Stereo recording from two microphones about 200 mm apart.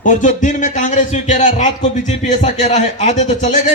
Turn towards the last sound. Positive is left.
turn(degrees=35)  # may be behind; listen again after turning